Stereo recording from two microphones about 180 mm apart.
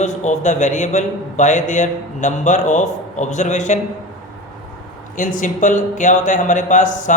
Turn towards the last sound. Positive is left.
turn(degrees=45)  # may be behind; listen again after turning